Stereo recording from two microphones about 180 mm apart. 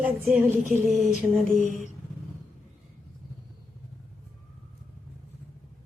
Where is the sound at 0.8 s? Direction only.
Centre (ahead or behind).